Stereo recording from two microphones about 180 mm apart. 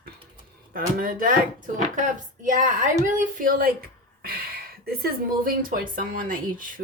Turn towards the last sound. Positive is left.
turn(degrees=-50)  # may be behind; listen again after turning